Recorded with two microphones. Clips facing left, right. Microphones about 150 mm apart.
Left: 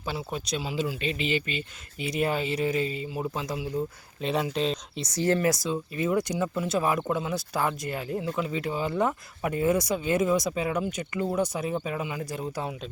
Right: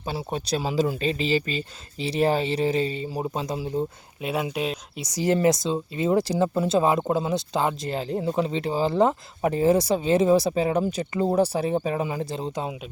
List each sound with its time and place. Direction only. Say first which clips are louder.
0.0 s speech: right 3 dB; 35° right (ahead or behind)
4.2 s speech: even; 5° right (ahead or behind); by 12.7 s 25° right (ahead or behind)